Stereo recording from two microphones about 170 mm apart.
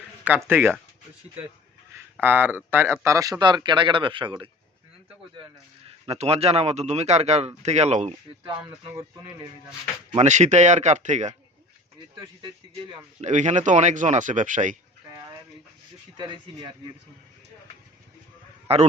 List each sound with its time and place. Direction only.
0.4 s speech: 10° right (ahead or behind)
2.2 s speech: 10° right (ahead or behind); by 4.4 s 30° right (ahead or behind)
6.1 s speech: 35° right (ahead or behind)
10.2 s speech: 45° right (ahead or behind)
13.2 s speech: 45° right (ahead or behind)
16.1 s speech: 25° right (ahead or behind)
18.7 s speech: 35° right (ahead or behind)